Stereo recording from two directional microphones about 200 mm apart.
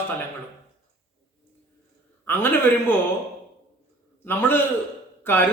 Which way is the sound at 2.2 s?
10° left (ahead or behind).